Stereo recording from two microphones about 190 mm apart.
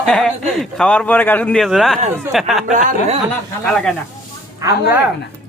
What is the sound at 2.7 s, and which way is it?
Speech, 40° right (ahead or behind).